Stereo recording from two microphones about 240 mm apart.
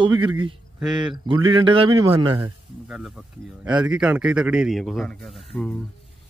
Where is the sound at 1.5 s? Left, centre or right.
Right; by 5.7 s centre.